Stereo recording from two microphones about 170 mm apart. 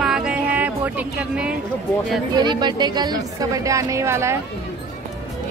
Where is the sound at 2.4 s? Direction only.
25° right (ahead or behind).